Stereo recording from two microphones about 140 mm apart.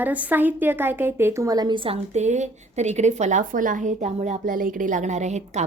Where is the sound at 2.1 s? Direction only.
55° right (ahead or behind).